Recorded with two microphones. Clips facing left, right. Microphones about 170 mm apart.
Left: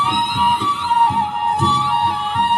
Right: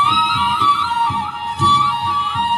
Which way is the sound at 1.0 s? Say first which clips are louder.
Left 4 dB; 60° left (ahead or behind).